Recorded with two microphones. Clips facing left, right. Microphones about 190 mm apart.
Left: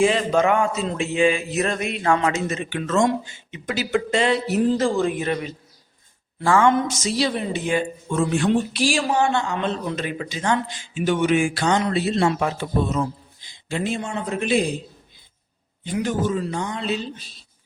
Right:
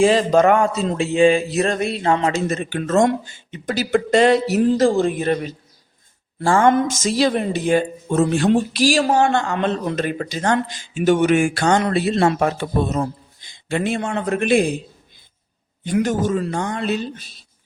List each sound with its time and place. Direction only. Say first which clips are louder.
0.0 s speech: right 4 dB; 35° right (ahead or behind)
3.5 s speech: right 4 dB; 40° right (ahead or behind)
7.0 s speech: right 5 dB; 50° right (ahead or behind)
13.7 s a man's voice: right 4 dB; 65° right (ahead or behind)
15.8 s speech: right 4 dB; 50° right (ahead or behind)